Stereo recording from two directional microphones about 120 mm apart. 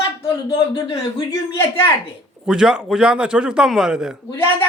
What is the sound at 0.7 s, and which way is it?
Speech, 35° left (ahead or behind).